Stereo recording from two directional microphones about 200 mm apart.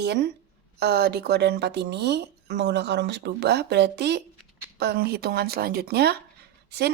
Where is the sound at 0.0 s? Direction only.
55° right (ahead or behind).